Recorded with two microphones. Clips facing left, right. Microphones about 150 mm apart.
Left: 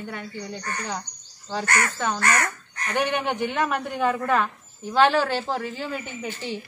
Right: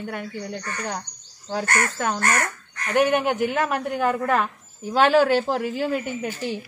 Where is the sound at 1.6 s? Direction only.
50° right (ahead or behind).